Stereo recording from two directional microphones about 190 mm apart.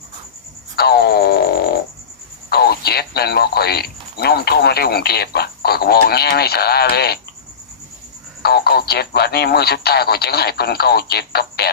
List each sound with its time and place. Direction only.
0.8 s a sound: 55° left (ahead or behind)
2.5 s speech: 55° left (ahead or behind)
8.4 s speech: 55° left (ahead or behind)